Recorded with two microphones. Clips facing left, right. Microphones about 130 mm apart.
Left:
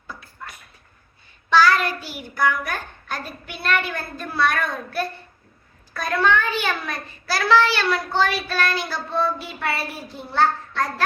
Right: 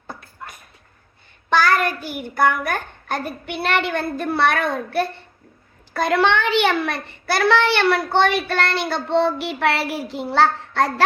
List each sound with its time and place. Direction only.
0.1 s a sound: 50° right (ahead or behind)
1.5 s a child's voice: 55° right (ahead or behind)
5.9 s a child's voice: 80° right